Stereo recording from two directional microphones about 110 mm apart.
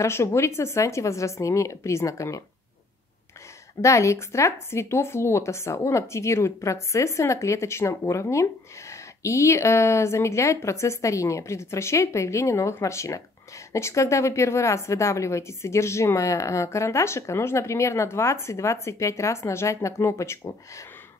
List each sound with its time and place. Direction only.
0.0 s speech: 25° left (ahead or behind)
3.8 s speech: 25° left (ahead or behind)